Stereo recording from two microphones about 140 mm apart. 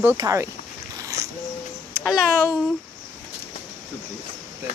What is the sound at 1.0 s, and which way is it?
Owl, 25° right (ahead or behind).